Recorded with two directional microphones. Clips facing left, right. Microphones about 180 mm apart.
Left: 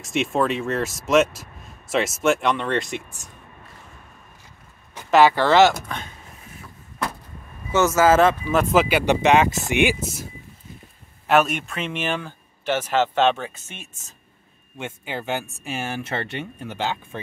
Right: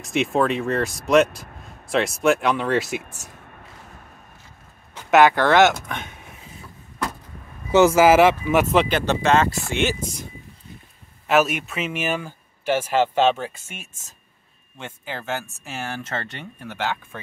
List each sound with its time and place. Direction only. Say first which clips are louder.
0.0 s speech: right 1 dB; centre (ahead or behind)
5.2 s speech: left 1 dB; centre (ahead or behind)
7.8 s speech: right 2 dB; 10° right (ahead or behind)
8.7 s speech: left 1 dB; 10° left (ahead or behind)
11.2 s speech: even; centre (ahead or behind)
14.8 s speech: left 3 dB; 15° left (ahead or behind)